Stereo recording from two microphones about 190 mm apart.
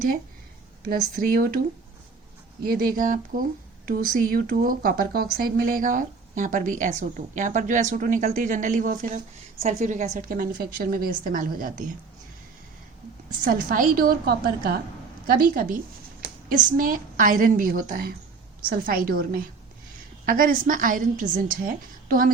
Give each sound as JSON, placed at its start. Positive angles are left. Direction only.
{"t": 0.9, "sound": "speech", "side_deg": -50}
{"t": 2.6, "sound": "speech", "side_deg": -50}
{"t": 13.4, "sound": "a woman's voice", "side_deg": -50}